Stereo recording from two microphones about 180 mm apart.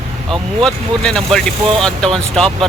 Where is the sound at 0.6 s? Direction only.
5° left (ahead or behind).